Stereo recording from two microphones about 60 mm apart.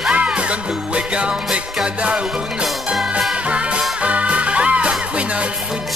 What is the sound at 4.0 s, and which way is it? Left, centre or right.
Music, right.